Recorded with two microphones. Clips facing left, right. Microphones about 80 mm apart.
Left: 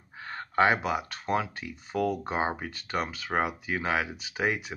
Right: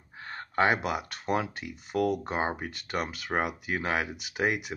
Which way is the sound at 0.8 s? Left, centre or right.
Left.